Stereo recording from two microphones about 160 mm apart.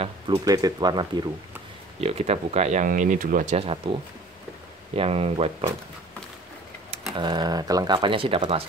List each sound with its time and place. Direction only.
0.5 s speech: 25° right (ahead or behind)
2.0 s speech: 40° right (ahead or behind); by 3.5 s 55° right (ahead or behind)
3.5 s speech: 35° right (ahead or behind)
4.9 s speech: 40° right (ahead or behind)
7.2 s speech: 25° right (ahead or behind)